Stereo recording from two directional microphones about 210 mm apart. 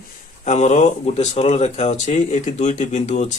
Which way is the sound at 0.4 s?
35° left (ahead or behind).